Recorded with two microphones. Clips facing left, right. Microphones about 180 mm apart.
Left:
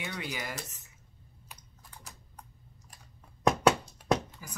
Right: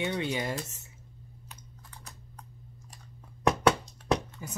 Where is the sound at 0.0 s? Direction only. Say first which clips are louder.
Right 7 dB; 25° right (ahead or behind).